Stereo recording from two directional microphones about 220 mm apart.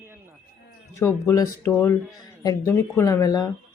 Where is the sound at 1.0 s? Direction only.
15° left (ahead or behind).